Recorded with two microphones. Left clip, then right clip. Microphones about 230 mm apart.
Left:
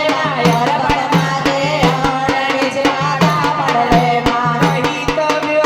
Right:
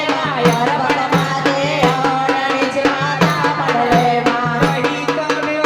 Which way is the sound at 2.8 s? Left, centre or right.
Left.